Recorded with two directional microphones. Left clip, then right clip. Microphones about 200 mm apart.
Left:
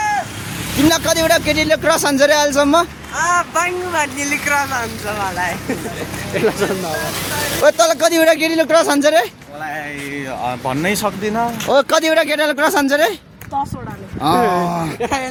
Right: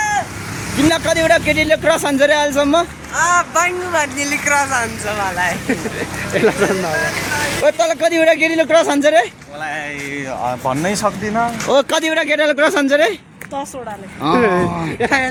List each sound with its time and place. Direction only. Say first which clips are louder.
1.2 s speech: right 1 dB; 10° left (ahead or behind)
3.2 s speech: right 2 dB; centre (ahead or behind)
7.6 s speech: left 3 dB; 15° left (ahead or behind)
10.4 s speech: right 1 dB; 5° left (ahead or behind)
12.5 s speech: right 1 dB; centre (ahead or behind)
14.2 s speech: even; 15° left (ahead or behind)
15.0 s speech: right 6 dB; 40° right (ahead or behind)